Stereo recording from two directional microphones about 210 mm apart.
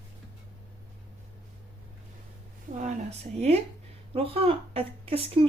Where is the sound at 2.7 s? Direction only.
35° right (ahead or behind).